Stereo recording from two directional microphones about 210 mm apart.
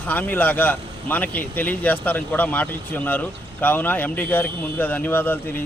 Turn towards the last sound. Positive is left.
turn(degrees=10)  # may be behind; listen again after turning